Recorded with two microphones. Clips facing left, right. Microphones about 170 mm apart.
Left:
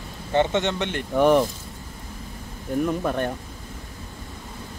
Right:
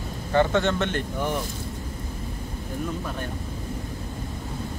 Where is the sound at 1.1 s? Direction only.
75° left (ahead or behind).